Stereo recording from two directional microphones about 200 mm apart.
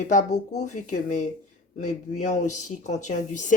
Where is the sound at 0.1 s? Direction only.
35° left (ahead or behind).